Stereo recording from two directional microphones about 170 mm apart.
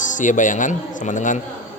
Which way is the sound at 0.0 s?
50° left (ahead or behind).